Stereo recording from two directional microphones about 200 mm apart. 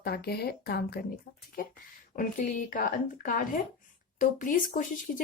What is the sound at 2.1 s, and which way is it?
Speech, 40° left (ahead or behind).